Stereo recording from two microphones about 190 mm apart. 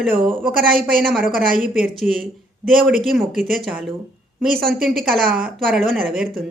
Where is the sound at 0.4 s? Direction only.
50° right (ahead or behind).